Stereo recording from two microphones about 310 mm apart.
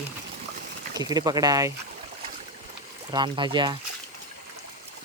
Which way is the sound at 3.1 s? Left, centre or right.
Centre.